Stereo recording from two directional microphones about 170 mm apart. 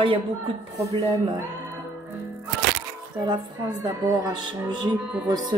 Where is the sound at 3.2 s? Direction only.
25° right (ahead or behind).